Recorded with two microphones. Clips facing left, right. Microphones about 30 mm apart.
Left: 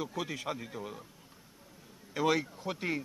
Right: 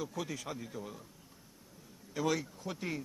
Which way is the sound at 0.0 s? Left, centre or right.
Left.